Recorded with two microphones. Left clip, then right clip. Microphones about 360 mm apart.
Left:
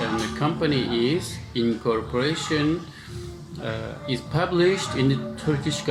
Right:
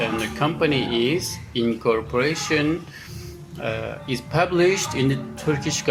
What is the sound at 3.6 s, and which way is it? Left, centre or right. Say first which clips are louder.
Speech: right 4 dB; right.